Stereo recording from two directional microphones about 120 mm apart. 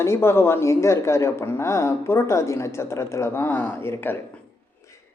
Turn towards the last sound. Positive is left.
turn(degrees=20)  # may be behind; listen again after turning